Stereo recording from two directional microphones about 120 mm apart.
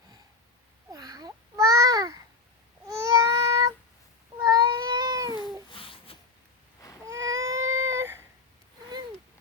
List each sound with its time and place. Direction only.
0.9 s babbling: 30° right (ahead or behind)
2.8 s child singing: 25° right (ahead or behind)
4.4 s cat: 30° right (ahead or behind)
5.7 s a sound: 50° left (ahead or behind)
7.0 s baby cry: 25° right (ahead or behind)